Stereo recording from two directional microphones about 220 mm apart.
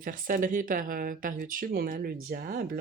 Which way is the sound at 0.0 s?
40° right (ahead or behind).